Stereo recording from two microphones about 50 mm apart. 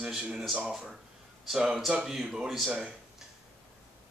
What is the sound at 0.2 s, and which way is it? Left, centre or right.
Speech, centre.